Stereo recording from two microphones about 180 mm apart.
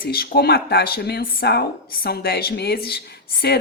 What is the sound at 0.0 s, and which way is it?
Speech, 55° left (ahead or behind).